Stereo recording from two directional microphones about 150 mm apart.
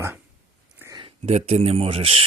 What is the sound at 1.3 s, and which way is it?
Speech, 45° right (ahead or behind).